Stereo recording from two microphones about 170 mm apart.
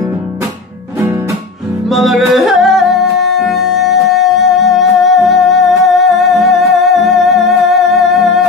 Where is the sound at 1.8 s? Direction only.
Centre (ahead or behind).